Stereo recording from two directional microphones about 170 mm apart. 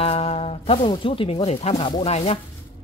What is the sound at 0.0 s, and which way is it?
A man's voice, 35° left (ahead or behind).